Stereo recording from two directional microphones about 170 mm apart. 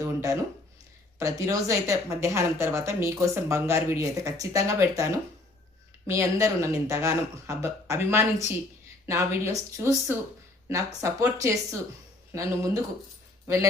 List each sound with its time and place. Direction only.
0.0 s speech: 20° right (ahead or behind)
6.1 s speech: 15° right (ahead or behind)